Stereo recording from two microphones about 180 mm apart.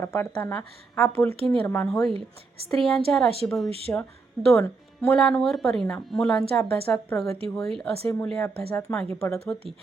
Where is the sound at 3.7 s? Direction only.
35° right (ahead or behind).